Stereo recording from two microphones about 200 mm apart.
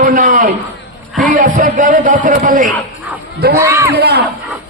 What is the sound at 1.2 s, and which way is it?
Speech, 40° right (ahead or behind).